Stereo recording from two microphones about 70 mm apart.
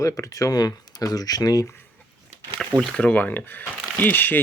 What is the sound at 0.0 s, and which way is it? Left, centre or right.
Speech, left.